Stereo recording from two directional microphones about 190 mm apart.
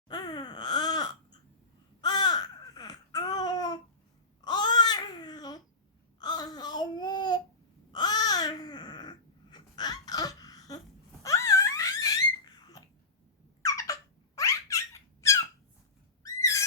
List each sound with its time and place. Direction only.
0.1 s wail: 20° left (ahead or behind)
2.0 s babbling: 20° left (ahead or behind)
11.2 s dog: 15° left (ahead or behind)
12.5 s a sound: 20° left (ahead or behind)
13.7 s squeak: 15° left (ahead or behind)
16.2 s a sound: 15° left (ahead or behind)